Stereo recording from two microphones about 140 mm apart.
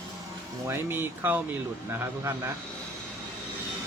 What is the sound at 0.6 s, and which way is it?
Speech, 15° right (ahead or behind).